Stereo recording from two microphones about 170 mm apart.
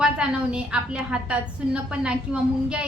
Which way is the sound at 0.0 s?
5° right (ahead or behind).